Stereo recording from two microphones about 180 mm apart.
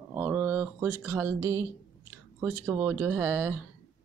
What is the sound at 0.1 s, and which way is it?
Speech, 15° right (ahead or behind).